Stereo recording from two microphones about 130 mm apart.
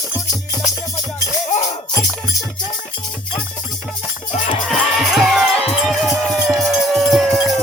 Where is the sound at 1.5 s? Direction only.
65° left (ahead or behind).